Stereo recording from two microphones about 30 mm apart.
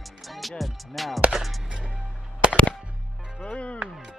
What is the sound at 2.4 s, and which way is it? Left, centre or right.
Music, right.